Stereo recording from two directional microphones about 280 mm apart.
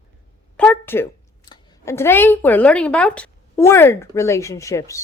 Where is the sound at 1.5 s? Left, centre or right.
Centre.